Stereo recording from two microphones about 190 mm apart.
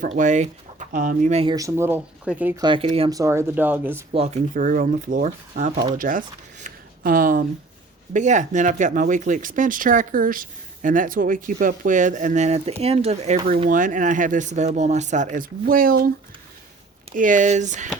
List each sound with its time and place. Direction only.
0.0 s speech: 40° right (ahead or behind)
1.5 s speech: 15° right (ahead or behind)
2.6 s speech: 25° right (ahead or behind)
3.1 s speech: 15° right (ahead or behind)
4.1 s speech: 35° right (ahead or behind); by 16.1 s 50° right (ahead or behind)
17.2 s speech: 40° right (ahead or behind)